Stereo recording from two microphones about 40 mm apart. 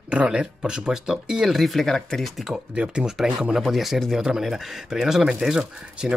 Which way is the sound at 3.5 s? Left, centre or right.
Centre.